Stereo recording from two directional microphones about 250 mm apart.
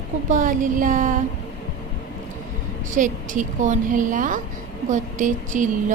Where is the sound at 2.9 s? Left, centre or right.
Right.